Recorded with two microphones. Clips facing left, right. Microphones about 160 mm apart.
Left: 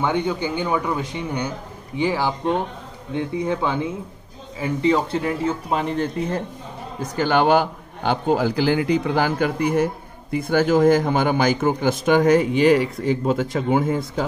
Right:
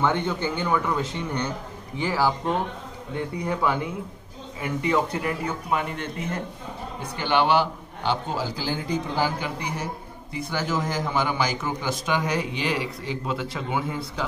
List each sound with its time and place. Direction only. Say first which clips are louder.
0.0 s speech: left 2 dB; 15° left (ahead or behind); by 6.2 s 30° left (ahead or behind)
7.0 s a man's voice: left 4 dB; 45° left (ahead or behind)